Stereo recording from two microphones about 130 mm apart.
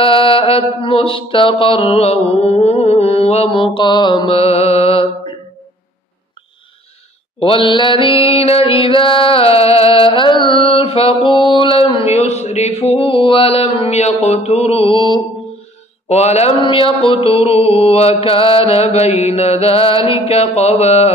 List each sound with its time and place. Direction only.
0.0 s mantra: 45° left (ahead or behind)
4.3 s mantra: 50° left (ahead or behind)
7.3 s mantra: 45° left (ahead or behind)
16.1 s mantra: 55° left (ahead or behind)
16.6 s mantra: 45° left (ahead or behind)